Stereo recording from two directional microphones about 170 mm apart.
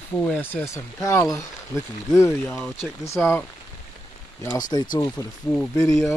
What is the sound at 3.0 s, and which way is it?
Speech, 15° left (ahead or behind).